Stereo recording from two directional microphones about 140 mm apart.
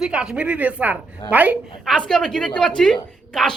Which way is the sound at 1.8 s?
5° left (ahead or behind).